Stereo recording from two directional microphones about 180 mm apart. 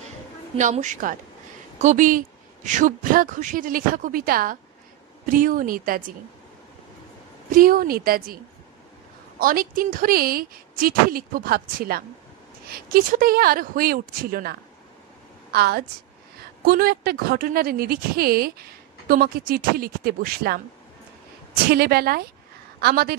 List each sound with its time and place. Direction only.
0.6 s speech: 45° right (ahead or behind)
7.5 s speech: 50° right (ahead or behind)
9.4 s a woman's voice: 50° right (ahead or behind)
21.6 s speech: 60° right (ahead or behind)